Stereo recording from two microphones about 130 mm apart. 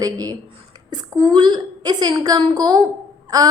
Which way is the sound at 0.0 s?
30° right (ahead or behind).